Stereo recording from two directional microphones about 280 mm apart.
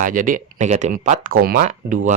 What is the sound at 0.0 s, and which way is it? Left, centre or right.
Speech, right.